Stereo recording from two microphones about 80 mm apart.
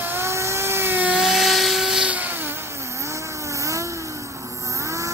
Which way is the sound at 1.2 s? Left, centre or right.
Centre.